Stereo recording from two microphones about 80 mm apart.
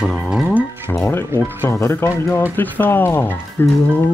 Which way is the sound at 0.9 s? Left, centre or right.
Left.